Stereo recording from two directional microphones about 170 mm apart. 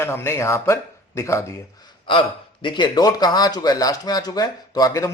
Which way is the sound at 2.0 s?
30° left (ahead or behind).